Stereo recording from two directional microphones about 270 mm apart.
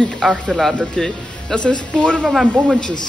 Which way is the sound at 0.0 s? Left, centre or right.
Centre.